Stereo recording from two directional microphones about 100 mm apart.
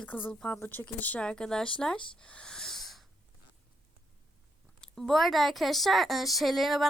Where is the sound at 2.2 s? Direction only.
10° left (ahead or behind).